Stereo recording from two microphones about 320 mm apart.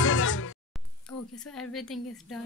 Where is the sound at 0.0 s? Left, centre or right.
Left.